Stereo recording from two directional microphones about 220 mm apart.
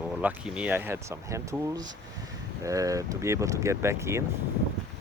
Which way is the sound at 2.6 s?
15° right (ahead or behind).